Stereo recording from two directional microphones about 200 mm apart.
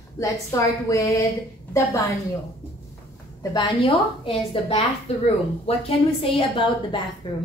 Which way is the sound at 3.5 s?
25° left (ahead or behind).